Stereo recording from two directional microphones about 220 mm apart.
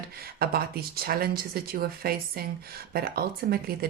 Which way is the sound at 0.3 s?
45° right (ahead or behind).